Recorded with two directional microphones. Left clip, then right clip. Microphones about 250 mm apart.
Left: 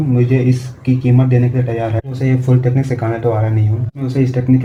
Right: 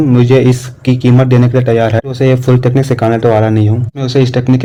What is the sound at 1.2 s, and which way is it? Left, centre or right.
A man's voice, right.